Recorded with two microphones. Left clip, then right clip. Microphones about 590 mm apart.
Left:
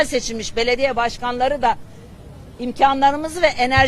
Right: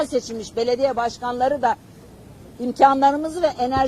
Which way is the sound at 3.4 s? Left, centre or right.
Left.